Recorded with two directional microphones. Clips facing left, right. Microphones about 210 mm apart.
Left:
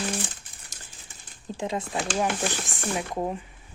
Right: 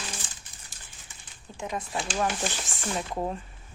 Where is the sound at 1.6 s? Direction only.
25° left (ahead or behind).